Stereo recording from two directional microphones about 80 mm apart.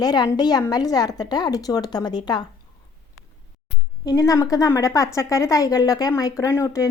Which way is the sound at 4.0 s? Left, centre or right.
Left.